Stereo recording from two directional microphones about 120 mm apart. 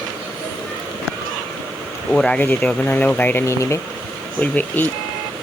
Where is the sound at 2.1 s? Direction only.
10° left (ahead or behind).